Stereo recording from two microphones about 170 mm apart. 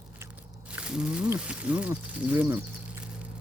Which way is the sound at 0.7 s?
5° right (ahead or behind).